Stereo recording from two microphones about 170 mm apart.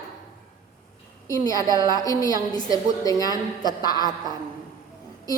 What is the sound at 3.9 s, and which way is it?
Speech, 25° right (ahead or behind).